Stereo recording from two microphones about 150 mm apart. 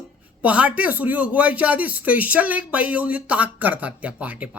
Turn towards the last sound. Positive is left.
turn(degrees=-10)  # may be behind; listen again after turning